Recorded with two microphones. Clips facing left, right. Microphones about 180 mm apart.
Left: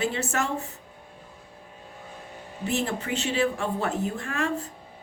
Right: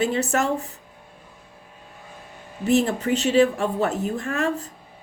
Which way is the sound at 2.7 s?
40° right (ahead or behind).